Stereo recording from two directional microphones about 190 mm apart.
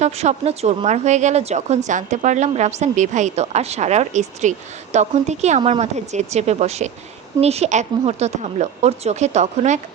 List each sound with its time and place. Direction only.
0.0 s a woman's voice: 35° right (ahead or behind)